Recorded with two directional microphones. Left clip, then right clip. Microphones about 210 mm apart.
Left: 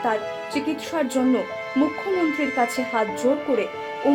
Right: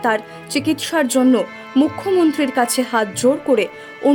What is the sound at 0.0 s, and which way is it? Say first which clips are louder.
Speech: right 4 dB; 55° right (ahead or behind).